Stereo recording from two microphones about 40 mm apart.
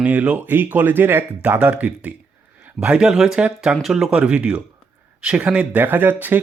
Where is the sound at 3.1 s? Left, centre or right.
Centre.